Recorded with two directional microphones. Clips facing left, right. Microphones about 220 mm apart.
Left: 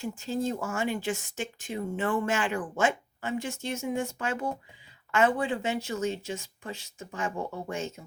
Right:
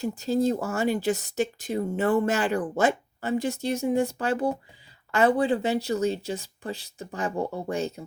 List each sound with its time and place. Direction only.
0.0 s speech: 40° right (ahead or behind)